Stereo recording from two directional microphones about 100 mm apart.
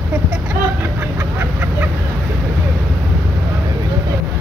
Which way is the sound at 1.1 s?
20° right (ahead or behind).